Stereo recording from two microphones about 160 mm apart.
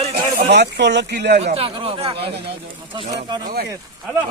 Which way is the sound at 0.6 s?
90° right.